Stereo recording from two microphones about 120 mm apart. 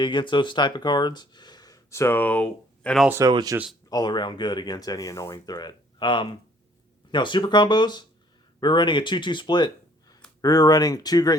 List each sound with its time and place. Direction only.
0.0 s speech: 40° left (ahead or behind); by 3.0 s 10° left (ahead or behind)
3.2 s speech: 30° right (ahead or behind)
3.8 s speech: 35° left (ahead or behind)